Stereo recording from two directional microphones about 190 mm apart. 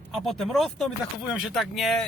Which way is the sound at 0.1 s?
Centre (ahead or behind).